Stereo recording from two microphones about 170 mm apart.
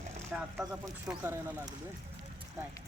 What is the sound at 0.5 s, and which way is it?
Speech, 10° right (ahead or behind).